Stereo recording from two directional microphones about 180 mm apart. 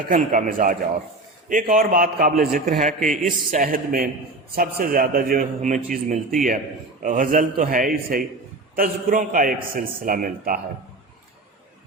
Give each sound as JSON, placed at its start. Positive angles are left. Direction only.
{"t": 0.1, "sound": "a man's voice", "side_deg": -45}